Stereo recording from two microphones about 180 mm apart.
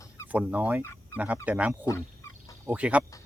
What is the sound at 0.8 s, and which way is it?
Fowl, 15° left (ahead or behind).